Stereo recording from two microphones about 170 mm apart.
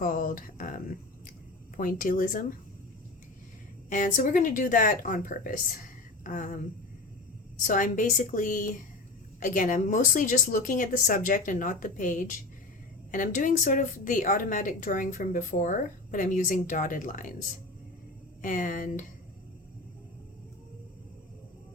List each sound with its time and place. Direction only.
0.0 s speech: 50° left (ahead or behind)
1.7 s a woman's voice: 55° left (ahead or behind)
3.8 s a woman's voice: 50° left (ahead or behind)
7.6 s a woman's voice: 50° left (ahead or behind)